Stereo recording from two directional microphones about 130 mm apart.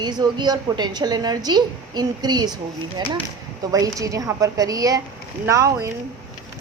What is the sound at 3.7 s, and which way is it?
A woman's voice, 25° right (ahead or behind).